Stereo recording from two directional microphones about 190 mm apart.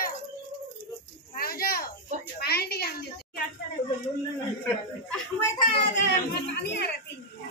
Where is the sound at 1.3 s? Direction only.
50° left (ahead or behind).